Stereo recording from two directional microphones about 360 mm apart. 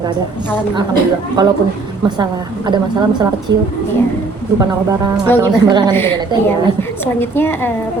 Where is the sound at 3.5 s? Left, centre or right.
Right.